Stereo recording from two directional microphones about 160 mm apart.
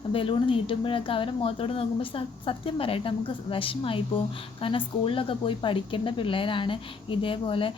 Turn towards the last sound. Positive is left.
turn(degrees=35)  # may be behind; listen again after turning